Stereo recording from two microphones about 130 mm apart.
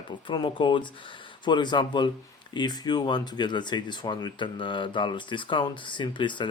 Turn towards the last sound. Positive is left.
turn(degrees=40)  # may be behind; listen again after turning